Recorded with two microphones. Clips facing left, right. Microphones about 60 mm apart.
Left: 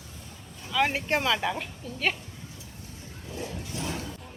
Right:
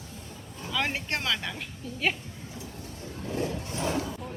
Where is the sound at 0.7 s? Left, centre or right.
Centre.